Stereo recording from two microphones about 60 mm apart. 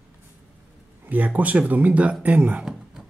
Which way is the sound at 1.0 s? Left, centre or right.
Right.